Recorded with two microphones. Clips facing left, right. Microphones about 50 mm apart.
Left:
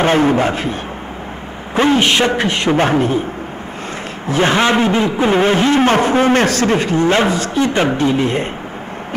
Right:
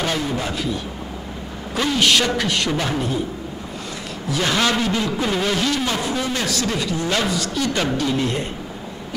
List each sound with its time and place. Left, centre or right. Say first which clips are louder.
0.0 s speech: left 10 dB; left
1.8 s speech: left 6 dB; left
4.3 s speech: left 7 dB; left